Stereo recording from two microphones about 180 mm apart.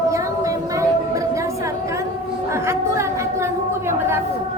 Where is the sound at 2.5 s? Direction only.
15° right (ahead or behind).